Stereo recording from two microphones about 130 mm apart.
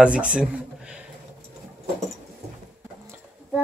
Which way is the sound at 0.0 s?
10° right (ahead or behind).